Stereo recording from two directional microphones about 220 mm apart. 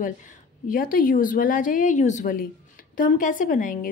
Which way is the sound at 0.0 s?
35° left (ahead or behind).